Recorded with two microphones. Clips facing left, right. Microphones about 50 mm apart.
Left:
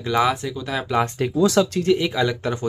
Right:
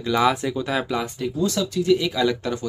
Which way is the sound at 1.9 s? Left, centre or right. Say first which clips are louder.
Right 2 dB; left.